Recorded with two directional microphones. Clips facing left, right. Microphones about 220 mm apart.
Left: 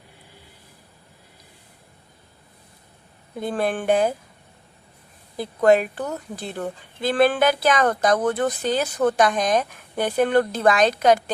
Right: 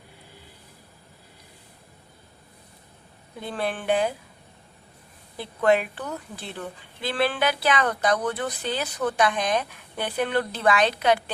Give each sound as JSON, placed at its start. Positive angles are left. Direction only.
{"t": 3.4, "sound": "a woman's voice", "side_deg": 45}
{"t": 5.4, "sound": "a woman's voice", "side_deg": 40}